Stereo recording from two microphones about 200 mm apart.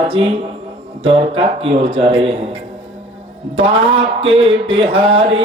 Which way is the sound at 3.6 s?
30° right (ahead or behind).